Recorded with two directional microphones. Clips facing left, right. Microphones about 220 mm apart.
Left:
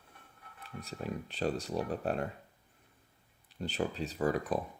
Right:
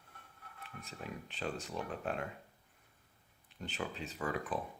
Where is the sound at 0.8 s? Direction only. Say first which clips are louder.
Left 7 dB; 40° left (ahead or behind).